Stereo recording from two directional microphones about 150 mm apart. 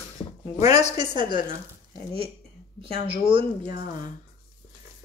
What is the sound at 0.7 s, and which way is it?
Speech, 50° left (ahead or behind).